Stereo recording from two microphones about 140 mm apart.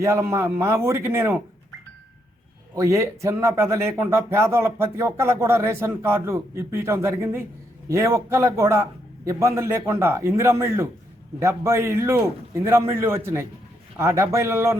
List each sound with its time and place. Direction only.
0.0 s speech: 20° right (ahead or behind)
2.7 s speech: 20° right (ahead or behind)